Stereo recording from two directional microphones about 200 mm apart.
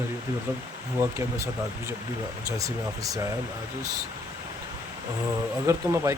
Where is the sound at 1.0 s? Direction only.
10° right (ahead or behind).